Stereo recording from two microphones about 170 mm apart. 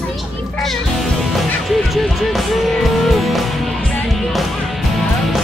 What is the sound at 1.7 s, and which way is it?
Music, centre (ahead or behind).